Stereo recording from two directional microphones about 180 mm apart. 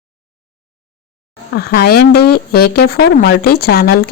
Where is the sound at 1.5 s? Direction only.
60° left (ahead or behind).